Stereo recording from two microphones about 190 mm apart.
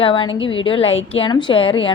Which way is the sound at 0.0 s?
25° left (ahead or behind).